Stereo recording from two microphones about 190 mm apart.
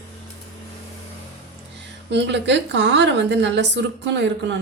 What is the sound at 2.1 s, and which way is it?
A woman's voice, 65° right (ahead or behind).